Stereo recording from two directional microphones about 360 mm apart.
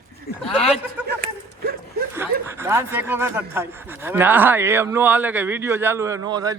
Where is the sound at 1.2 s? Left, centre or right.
Right.